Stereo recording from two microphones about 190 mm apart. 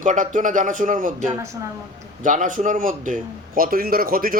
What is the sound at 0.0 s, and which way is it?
A man's voice, 40° right (ahead or behind).